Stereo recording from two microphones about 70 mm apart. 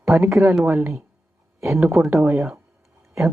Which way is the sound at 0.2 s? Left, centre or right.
Right.